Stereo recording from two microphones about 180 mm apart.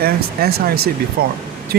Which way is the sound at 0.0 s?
60° right (ahead or behind).